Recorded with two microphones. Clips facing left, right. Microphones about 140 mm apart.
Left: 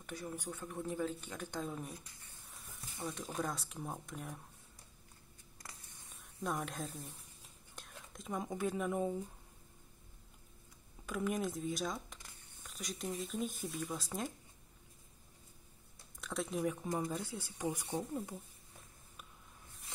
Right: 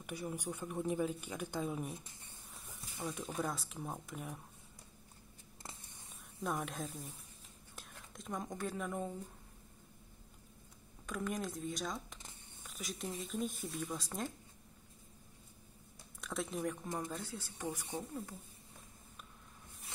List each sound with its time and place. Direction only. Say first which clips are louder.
0.0 s speech: right 2 dB; 10° right (ahead or behind)
2.0 s speech: right 2 dB; 25° right (ahead or behind)
3.0 s speech: right 1 dB; 5° right (ahead or behind)
6.0 s speech: even; centre (ahead or behind)
11.1 s speech: left 3 dB; 5° left (ahead or behind)
16.2 s speech: left 2 dB; centre (ahead or behind)